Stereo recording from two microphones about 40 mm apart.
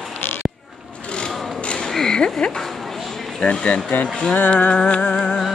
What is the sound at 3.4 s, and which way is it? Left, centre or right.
Music, left.